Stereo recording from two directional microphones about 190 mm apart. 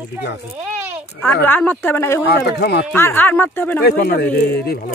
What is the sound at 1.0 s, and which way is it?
Speech, 10° left (ahead or behind).